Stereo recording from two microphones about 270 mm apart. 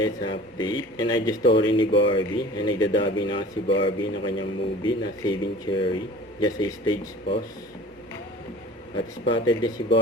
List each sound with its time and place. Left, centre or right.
0.3 s speech: centre
9.2 s speech: centre